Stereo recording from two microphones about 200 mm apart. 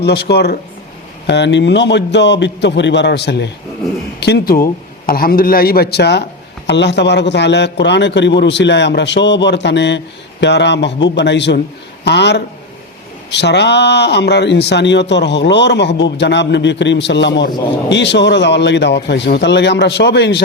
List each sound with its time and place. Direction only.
0.0 s a man's voice: 55° left (ahead or behind)